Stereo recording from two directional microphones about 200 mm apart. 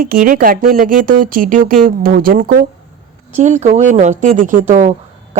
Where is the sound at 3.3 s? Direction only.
35° right (ahead or behind).